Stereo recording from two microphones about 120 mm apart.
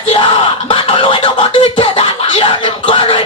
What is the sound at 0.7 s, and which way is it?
Scratching, 45° left (ahead or behind).